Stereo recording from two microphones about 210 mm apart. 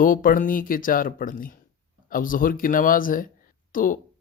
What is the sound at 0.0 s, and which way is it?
Speech, 40° left (ahead or behind).